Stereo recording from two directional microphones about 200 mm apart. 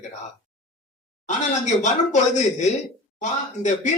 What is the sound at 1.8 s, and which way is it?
Speech, 35° left (ahead or behind).